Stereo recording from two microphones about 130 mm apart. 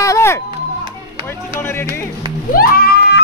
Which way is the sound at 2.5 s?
90° left.